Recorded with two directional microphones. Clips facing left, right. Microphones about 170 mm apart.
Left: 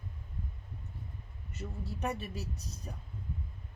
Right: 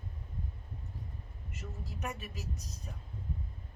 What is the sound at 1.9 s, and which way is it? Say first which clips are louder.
Speech: left 5 dB; 30° left (ahead or behind).